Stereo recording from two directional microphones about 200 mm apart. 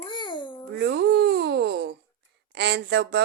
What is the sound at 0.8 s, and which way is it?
Speech, 60° right (ahead or behind).